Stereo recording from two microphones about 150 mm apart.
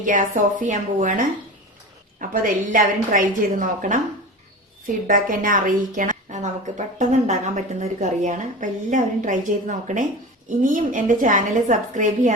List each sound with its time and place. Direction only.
0.0 s a woman's voice: 60° right (ahead or behind)
2.3 s a woman's voice: 65° right (ahead or behind)
5.0 s a woman's voice: 65° right (ahead or behind)